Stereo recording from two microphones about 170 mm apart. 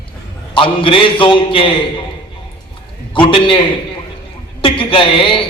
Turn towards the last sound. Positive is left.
turn(degrees=30)  # may be behind; listen again after turning